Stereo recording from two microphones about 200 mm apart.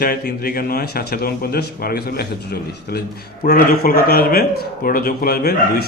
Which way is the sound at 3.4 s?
45° left (ahead or behind).